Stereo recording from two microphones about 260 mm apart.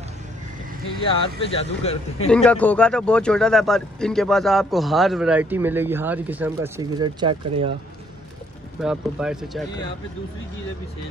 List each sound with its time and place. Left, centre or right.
1.2 s speech: left
2.2 s a man's voice: centre
8.8 s a man's voice: centre